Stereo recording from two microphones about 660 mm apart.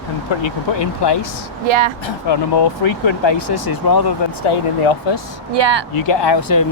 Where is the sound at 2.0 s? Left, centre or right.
Left.